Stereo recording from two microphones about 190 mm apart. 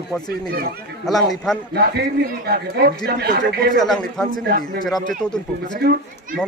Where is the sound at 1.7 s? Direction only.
55° right (ahead or behind).